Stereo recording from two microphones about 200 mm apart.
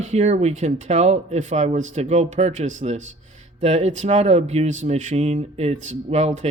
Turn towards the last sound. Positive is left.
turn(degrees=-35)  # may be behind; listen again after turning